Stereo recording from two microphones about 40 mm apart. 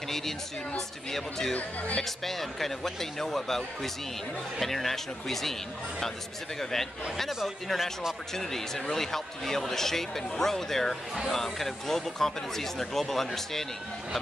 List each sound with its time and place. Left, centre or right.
0.1 s speech: centre
1.5 s speech: left
2.0 s speech: centre